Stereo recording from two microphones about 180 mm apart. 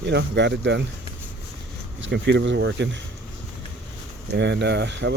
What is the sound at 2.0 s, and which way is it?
Speech, 75° right (ahead or behind).